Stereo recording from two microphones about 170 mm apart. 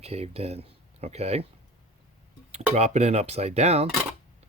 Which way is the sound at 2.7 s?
40° right (ahead or behind).